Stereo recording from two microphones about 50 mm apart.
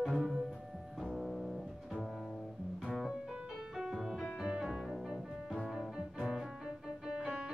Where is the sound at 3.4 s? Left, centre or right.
Centre.